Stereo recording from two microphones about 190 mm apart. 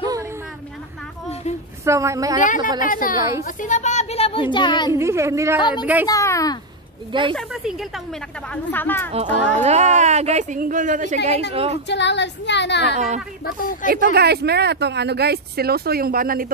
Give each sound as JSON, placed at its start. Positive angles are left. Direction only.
{"t": 1.9, "sound": "a woman's voice", "side_deg": -15}
{"t": 2.4, "sound": "a woman's voice", "side_deg": 45}
{"t": 4.9, "sound": "a woman's voice", "side_deg": -15}
{"t": 5.6, "sound": "a woman's voice", "side_deg": 25}
{"t": 7.1, "sound": "speech", "side_deg": -25}
{"t": 7.3, "sound": "speech", "side_deg": 0}
{"t": 8.7, "sound": "a child's voice", "side_deg": 10}
{"t": 9.1, "sound": "speech", "side_deg": -35}
{"t": 11.5, "sound": "speech", "side_deg": -30}
{"t": 11.9, "sound": "a woman's voice", "side_deg": 65}
{"t": 12.9, "sound": "speech", "side_deg": -40}
{"t": 14.1, "sound": "speech", "side_deg": -60}